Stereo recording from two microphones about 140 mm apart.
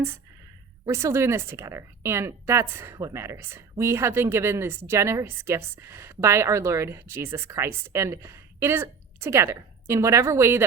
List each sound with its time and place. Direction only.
0.9 s a woman's voice: 20° right (ahead or behind)